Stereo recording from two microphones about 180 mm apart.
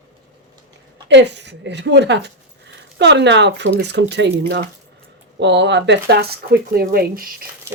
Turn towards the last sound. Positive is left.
turn(degrees=-55)  # may be behind; listen again after turning